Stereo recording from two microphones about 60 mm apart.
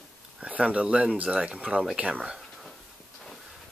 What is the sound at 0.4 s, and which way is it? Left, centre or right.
Speech, right.